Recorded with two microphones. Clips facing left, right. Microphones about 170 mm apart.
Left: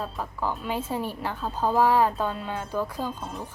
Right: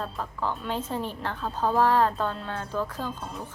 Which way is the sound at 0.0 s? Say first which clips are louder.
Left 1 dB; 10° left (ahead or behind).